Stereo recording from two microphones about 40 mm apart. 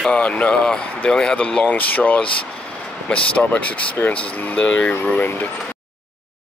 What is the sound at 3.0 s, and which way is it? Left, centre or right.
Speech, left.